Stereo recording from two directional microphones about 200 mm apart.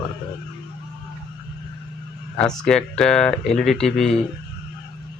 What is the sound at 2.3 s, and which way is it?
Speech, 5° left (ahead or behind).